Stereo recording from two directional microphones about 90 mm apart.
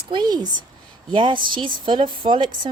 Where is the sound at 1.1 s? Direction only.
65° right (ahead or behind).